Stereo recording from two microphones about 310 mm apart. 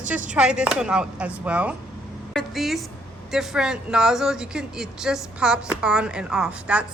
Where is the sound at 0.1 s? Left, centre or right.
Centre.